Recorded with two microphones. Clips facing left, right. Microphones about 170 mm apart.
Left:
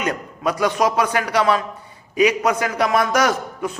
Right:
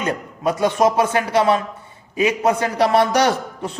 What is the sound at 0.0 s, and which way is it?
A man's voice, 25° right (ahead or behind).